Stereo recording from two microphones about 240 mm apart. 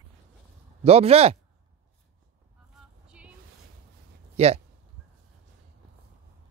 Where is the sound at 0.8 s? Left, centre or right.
Right.